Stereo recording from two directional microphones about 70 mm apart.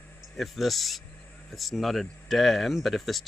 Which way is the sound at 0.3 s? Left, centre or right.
Centre.